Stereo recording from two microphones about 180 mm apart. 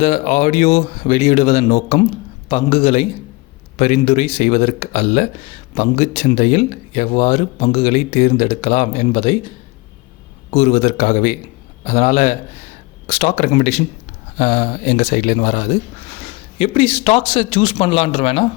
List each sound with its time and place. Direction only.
0.0 s speech: 40° left (ahead or behind)
10.5 s speech: 35° left (ahead or behind)